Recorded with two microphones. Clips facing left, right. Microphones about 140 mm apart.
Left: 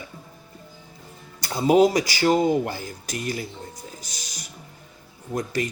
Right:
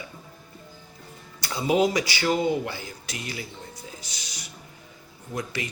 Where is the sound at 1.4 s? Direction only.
45° left (ahead or behind).